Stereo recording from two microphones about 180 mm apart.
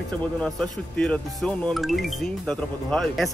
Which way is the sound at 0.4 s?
5° left (ahead or behind).